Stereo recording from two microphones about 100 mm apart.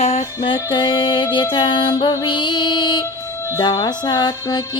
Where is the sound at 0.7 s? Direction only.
55° left (ahead or behind).